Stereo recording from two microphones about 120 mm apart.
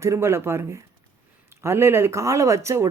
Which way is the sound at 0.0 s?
25° right (ahead or behind).